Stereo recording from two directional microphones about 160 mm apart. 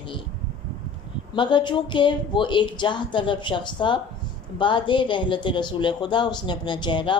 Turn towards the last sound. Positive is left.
turn(degrees=30)  # may be behind; listen again after turning